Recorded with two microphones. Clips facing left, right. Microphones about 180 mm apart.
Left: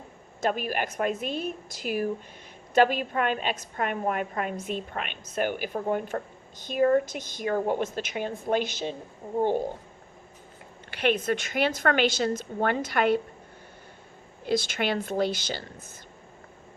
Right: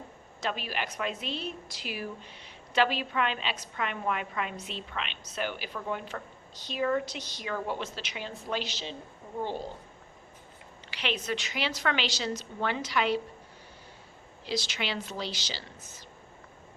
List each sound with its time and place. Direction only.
0.4 s a woman's voice: 50° left (ahead or behind)
10.9 s a woman's voice: 50° left (ahead or behind)
14.4 s a woman's voice: 50° left (ahead or behind)